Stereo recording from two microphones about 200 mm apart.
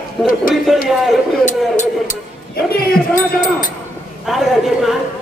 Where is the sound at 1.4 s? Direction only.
40° left (ahead or behind).